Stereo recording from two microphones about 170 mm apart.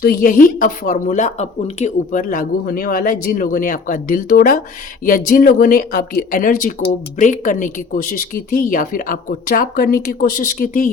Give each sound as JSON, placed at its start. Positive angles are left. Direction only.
{"t": 0.0, "sound": "speech", "side_deg": 60}